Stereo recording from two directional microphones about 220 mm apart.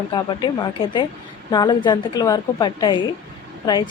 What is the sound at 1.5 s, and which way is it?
Speech, 20° left (ahead or behind).